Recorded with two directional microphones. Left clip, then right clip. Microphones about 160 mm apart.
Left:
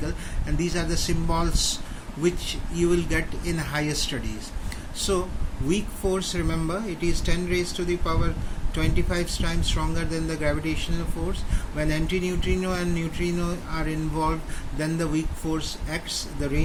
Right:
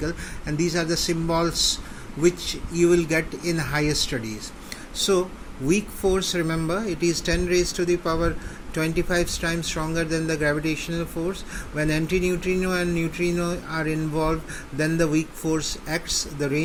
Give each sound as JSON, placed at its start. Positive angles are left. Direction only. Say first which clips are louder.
{"t": 0.0, "sound": "speech", "louder": "right 4 dB", "side_deg": -25}